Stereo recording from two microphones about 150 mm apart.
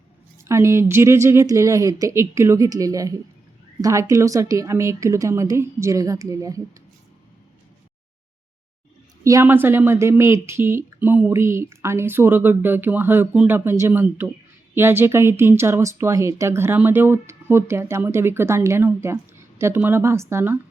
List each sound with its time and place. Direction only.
0.4 s a woman's voice: 20° right (ahead or behind)
9.2 s speech: 20° right (ahead or behind)